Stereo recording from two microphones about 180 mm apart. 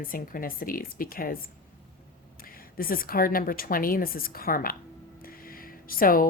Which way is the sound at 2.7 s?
50° left (ahead or behind).